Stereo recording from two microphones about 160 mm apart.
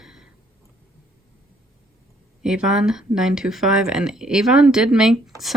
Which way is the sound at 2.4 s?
5° right (ahead or behind).